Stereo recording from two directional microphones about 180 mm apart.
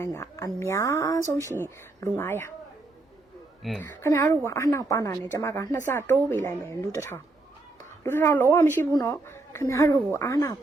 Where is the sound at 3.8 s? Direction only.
15° left (ahead or behind).